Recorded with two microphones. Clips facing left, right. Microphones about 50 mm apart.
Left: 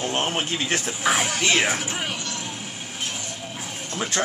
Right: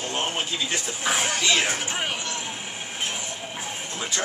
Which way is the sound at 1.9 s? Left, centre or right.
Centre.